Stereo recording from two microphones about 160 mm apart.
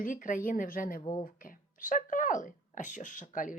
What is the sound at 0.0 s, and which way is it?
Speech, 55° left (ahead or behind).